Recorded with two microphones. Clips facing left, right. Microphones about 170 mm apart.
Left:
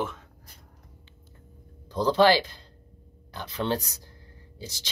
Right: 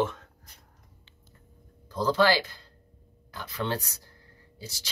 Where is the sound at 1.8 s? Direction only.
20° left (ahead or behind).